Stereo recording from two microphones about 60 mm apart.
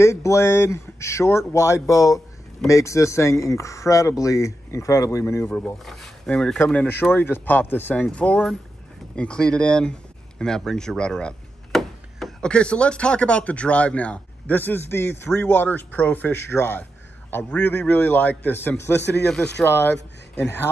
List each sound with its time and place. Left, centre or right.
0.0 s speech: left
5.9 s speech: centre
6.2 s speech: centre
7.0 s speech: left; by 11.3 s centre
11.7 s a sound: centre
12.4 s speech: centre; by 18.8 s left
18.8 s speech: left